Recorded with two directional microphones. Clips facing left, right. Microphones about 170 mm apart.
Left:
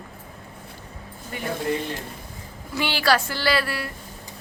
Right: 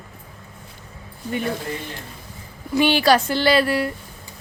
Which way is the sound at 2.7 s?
20° right (ahead or behind).